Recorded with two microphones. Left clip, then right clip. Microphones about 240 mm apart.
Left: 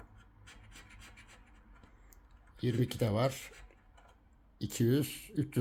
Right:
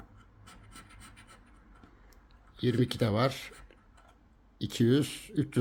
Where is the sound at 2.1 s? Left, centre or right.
Centre.